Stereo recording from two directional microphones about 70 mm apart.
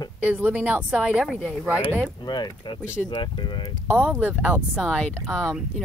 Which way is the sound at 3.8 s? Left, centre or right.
Right.